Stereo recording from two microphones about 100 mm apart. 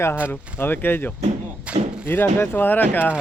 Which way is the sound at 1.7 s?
10° right (ahead or behind).